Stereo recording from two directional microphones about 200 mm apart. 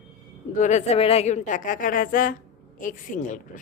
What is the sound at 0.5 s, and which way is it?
A woman's voice, 35° left (ahead or behind).